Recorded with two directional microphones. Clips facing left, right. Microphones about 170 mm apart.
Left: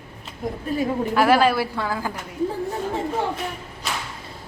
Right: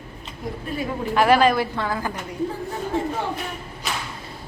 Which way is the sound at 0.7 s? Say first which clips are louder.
Left 5 dB; 40° left (ahead or behind).